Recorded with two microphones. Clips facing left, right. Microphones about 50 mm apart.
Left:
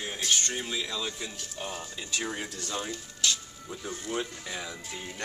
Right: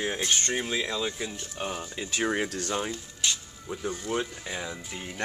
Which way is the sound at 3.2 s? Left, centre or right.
Right.